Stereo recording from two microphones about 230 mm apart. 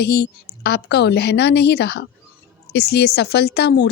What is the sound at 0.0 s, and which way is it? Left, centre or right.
Speech, left.